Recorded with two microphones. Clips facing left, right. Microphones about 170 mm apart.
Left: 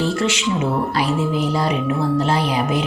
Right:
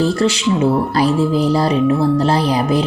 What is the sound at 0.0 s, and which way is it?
Music, 35° right (ahead or behind).